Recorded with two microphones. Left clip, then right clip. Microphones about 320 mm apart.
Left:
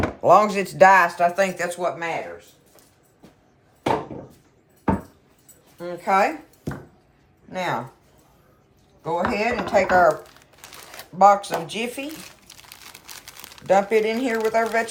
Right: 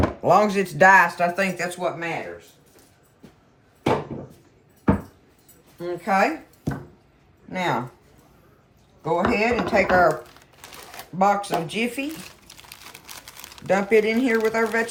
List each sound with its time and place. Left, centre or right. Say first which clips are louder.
0.2 s speech: left 3 dB; centre
5.8 s speech: left 2 dB; centre
6.7 s a sound: right 2 dB; centre
7.5 s speech: right 1 dB; centre
9.0 s speech: right 2 dB; centre
12.5 s crumpling: right 1 dB; centre
13.7 s speech: left 1 dB; centre